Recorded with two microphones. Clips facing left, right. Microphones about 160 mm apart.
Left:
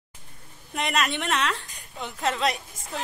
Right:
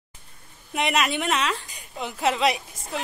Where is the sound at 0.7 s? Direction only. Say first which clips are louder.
Right 3 dB; 5° right (ahead or behind).